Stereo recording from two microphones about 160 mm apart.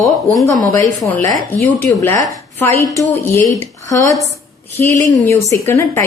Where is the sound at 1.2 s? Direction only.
15° left (ahead or behind).